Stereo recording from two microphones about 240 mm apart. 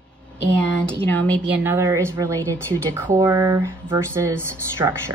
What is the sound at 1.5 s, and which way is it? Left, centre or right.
Speech, centre.